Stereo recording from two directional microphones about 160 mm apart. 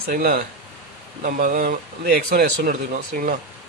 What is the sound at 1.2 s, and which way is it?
Speech, 55° right (ahead or behind).